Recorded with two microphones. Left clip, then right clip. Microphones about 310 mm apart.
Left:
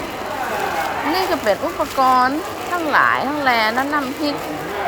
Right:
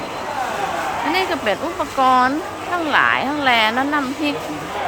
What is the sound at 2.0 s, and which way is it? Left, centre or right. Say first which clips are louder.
A woman's voice: even; centre.